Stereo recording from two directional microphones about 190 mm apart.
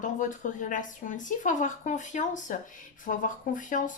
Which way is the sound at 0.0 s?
40° left (ahead or behind).